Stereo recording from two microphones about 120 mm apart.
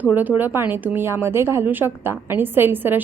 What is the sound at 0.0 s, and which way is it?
A woman's voice, 15° right (ahead or behind).